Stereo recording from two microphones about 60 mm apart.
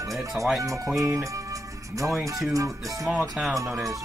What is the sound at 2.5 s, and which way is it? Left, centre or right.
Music, right.